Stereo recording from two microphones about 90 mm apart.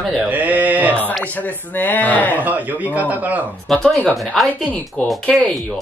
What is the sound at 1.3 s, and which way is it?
Speech, 20° left (ahead or behind).